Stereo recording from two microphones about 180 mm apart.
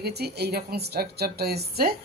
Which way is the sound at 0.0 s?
65° right (ahead or behind).